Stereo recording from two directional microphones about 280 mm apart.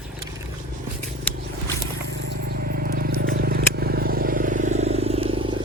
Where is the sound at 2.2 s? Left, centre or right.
Right.